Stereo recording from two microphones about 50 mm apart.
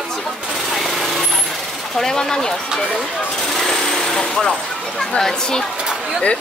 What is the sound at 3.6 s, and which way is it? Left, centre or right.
Jackhammer, centre.